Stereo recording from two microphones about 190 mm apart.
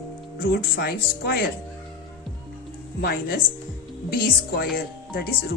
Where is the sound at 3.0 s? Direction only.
55° left (ahead or behind).